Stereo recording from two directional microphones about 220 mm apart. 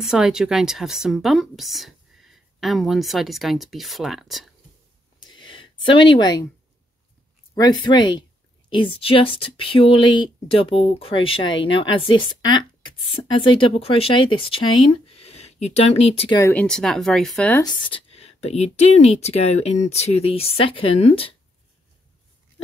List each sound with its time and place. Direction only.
0.0 s speech: centre (ahead or behind)
5.2 s a sound: 20° left (ahead or behind)
7.5 s speech: 20° left (ahead or behind)
16.3 s speech: 10° left (ahead or behind)
17.6 s speech: 20° left (ahead or behind)